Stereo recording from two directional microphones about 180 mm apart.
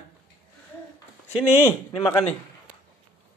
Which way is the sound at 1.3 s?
10° right (ahead or behind).